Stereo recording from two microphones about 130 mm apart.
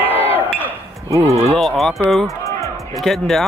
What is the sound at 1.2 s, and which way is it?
Speech, 50° right (ahead or behind).